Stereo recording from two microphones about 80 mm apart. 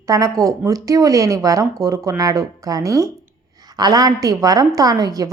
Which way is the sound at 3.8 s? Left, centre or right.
Right.